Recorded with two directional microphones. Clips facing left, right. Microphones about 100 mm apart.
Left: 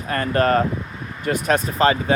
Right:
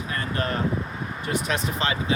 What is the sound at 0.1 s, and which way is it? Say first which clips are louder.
Speech: left 11 dB; 55° left (ahead or behind).